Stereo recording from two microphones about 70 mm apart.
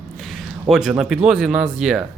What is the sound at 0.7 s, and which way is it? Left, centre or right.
Speech, centre.